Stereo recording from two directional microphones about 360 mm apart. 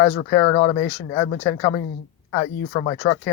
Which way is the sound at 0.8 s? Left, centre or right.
Left.